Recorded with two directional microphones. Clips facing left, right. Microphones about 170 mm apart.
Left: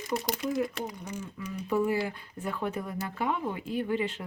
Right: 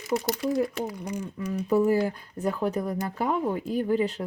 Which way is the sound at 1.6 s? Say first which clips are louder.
Right 5 dB; 40° right (ahead or behind).